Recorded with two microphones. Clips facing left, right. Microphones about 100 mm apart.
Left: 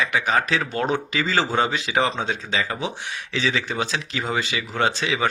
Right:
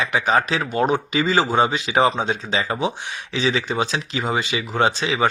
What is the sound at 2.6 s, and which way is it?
Speech, 30° right (ahead or behind).